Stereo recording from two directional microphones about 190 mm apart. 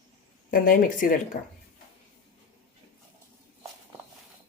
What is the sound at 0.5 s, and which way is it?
Speech, 50° left (ahead or behind).